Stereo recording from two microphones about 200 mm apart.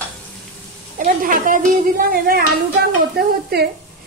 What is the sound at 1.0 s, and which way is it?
A woman's voice, 45° right (ahead or behind).